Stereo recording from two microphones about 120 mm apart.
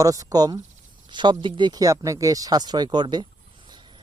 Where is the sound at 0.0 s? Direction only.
30° right (ahead or behind).